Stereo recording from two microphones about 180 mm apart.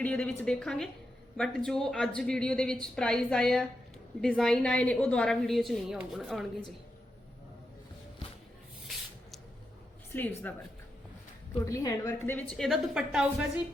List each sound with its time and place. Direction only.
0.0 s a woman's voice: 10° left (ahead or behind)
10.2 s a woman's voice: 10° left (ahead or behind)
11.6 s a woman's voice: 20° left (ahead or behind); by 13.5 s centre (ahead or behind)